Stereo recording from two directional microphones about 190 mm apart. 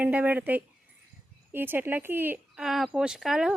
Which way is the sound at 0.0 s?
10° right (ahead or behind).